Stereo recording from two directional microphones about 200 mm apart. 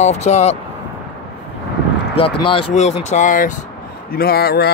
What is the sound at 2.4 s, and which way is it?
Speech, 25° left (ahead or behind).